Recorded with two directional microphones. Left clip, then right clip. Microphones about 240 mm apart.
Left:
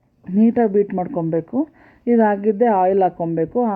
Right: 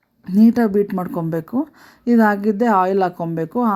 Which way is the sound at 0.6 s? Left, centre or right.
Right.